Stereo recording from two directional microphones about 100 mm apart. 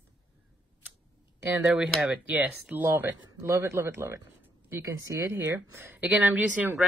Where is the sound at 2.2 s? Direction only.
15° right (ahead or behind).